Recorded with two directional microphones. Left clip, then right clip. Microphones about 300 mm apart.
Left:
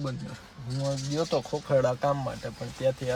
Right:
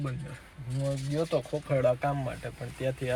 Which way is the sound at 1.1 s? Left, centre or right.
Centre.